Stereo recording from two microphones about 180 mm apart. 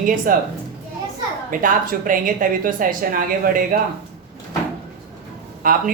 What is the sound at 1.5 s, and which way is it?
Speech, 50° right (ahead or behind).